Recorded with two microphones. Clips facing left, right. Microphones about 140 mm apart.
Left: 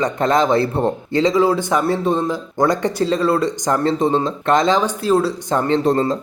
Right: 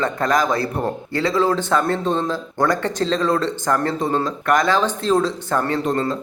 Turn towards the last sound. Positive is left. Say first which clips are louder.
# left 4 dB
turn(degrees=35)  # may be behind; listen again after turning